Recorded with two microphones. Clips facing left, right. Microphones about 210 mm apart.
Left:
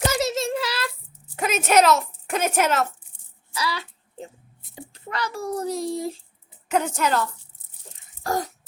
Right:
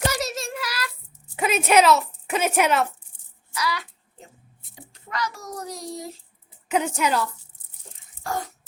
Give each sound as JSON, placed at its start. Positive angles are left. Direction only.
{"t": 0.1, "sound": "child singing", "side_deg": 25}
{"t": 1.4, "sound": "a sound", "side_deg": 45}
{"t": 1.9, "sound": "a woman's voice", "side_deg": -5}
{"t": 3.5, "sound": "music", "side_deg": 30}
{"t": 4.7, "sound": "a child's voice", "side_deg": 30}
{"t": 6.7, "sound": "a woman's voice", "side_deg": -5}
{"t": 8.2, "sound": "a sound", "side_deg": 40}